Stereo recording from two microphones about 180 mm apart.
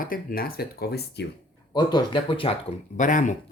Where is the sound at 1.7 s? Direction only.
25° left (ahead or behind).